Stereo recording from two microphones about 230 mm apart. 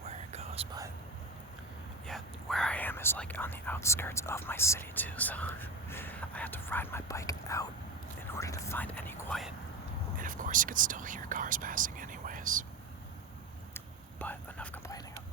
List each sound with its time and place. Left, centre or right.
0.0 s whispering: right
2.0 s speech: centre
10.2 s speech: right
13.7 s whispering: centre